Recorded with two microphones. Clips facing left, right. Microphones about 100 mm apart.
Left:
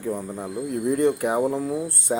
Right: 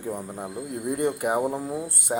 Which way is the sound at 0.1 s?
10° right (ahead or behind).